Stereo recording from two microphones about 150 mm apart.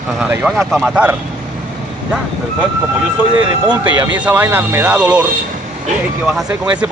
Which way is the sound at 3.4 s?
30° right (ahead or behind).